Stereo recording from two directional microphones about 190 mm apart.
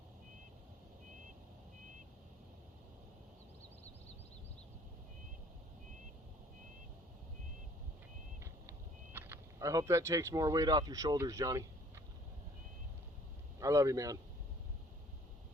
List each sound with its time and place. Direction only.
9.1 s speech: 10° right (ahead or behind)
13.6 s speech: 15° right (ahead or behind)